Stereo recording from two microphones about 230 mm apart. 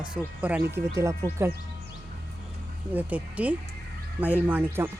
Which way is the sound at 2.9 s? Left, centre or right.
Centre.